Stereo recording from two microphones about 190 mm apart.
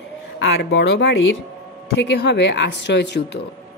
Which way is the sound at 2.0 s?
65° left (ahead or behind).